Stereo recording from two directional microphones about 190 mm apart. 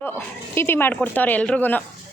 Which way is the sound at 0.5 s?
10° left (ahead or behind).